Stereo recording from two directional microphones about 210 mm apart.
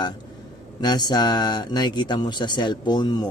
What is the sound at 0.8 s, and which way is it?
A man's voice, 20° left (ahead or behind).